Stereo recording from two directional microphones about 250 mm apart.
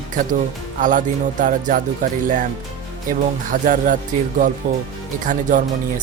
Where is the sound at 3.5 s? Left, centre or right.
Right.